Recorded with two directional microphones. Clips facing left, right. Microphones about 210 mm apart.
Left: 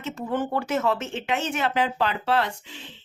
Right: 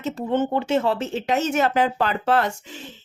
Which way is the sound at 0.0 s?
35° right (ahead or behind).